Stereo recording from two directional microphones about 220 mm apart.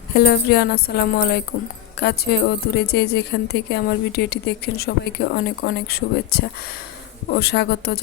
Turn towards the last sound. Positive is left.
turn(degrees=45)  # may be behind; listen again after turning